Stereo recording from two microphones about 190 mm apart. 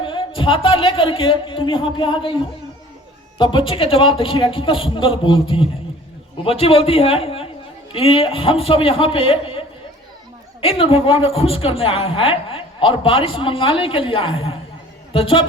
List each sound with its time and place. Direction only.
0.0 s a woman's voice: 25° left (ahead or behind)